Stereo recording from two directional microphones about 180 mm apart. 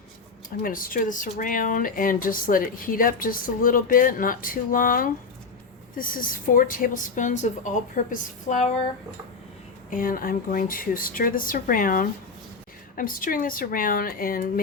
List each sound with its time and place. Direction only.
0.6 s speech: 50° left (ahead or behind)
9.9 s speech: 50° left (ahead or behind)